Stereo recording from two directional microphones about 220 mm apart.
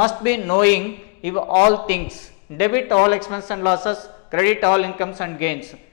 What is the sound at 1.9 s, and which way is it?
A man's voice, 10° left (ahead or behind).